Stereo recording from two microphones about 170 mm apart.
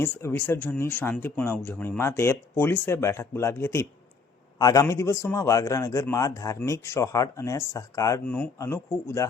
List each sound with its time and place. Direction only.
0.0 s a man's voice: 15° left (ahead or behind)
8.2 s speech: 10° left (ahead or behind)